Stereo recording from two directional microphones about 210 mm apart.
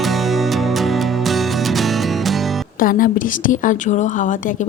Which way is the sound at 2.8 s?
40° left (ahead or behind).